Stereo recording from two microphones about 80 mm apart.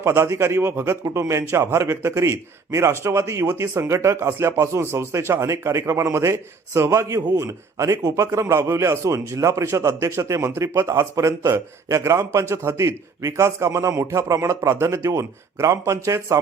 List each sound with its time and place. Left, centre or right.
0.0 s a man's voice: right